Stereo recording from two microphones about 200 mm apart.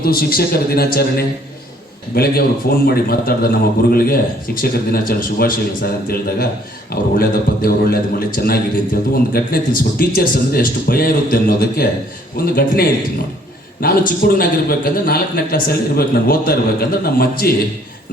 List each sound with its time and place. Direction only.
0.0 s a man's voice: 50° left (ahead or behind)